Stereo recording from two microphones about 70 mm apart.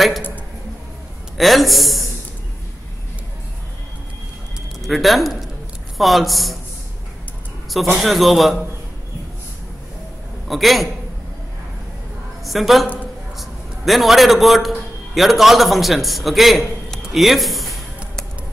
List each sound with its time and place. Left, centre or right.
1.4 s a man's voice: centre
4.8 s a man's voice: centre
7.9 s a man's voice: centre
10.5 s a man's voice: centre
12.4 s a man's voice: centre